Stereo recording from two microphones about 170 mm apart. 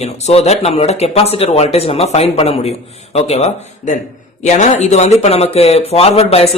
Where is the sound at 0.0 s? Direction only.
40° left (ahead or behind).